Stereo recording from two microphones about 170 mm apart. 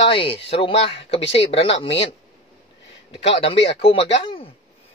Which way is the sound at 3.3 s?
35° left (ahead or behind).